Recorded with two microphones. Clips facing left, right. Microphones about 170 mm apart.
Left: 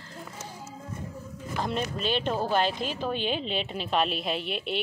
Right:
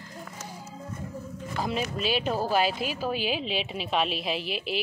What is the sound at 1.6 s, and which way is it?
A woman's voice, 5° right (ahead or behind).